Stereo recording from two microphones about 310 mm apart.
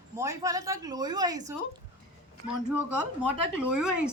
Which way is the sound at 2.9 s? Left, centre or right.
Right.